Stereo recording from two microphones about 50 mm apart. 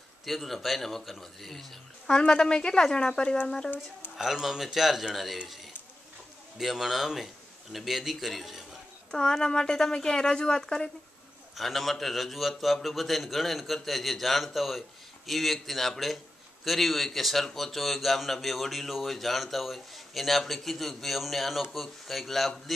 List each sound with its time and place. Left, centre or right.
0.2 s speech: centre
2.0 s speech: centre
4.2 s speech: centre
6.6 s speech: centre
9.1 s speech: centre